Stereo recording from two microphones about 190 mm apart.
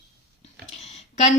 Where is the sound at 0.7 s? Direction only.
35° left (ahead or behind).